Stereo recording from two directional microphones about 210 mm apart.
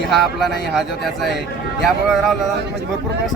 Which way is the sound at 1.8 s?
Centre (ahead or behind).